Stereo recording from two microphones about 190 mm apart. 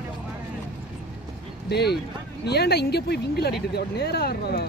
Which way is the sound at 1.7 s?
60° left (ahead or behind).